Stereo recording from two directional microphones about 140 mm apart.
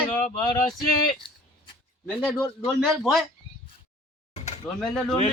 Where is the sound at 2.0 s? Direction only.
10° left (ahead or behind).